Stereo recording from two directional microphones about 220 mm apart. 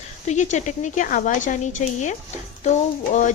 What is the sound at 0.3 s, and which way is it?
Speech, 35° left (ahead or behind).